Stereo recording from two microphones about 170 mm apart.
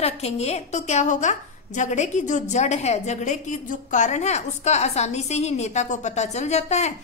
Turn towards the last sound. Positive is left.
turn(degrees=40)  # may be behind; listen again after turning